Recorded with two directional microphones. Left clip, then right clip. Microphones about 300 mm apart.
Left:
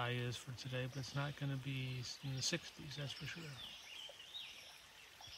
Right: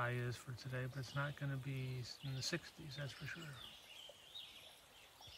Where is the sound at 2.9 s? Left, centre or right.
Centre.